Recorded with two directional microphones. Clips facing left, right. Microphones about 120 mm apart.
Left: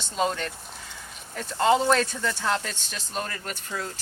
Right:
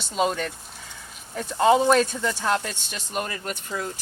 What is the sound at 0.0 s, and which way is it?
Speech, 10° right (ahead or behind).